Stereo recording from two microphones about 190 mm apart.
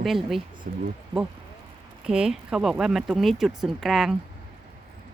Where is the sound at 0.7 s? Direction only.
45° right (ahead or behind).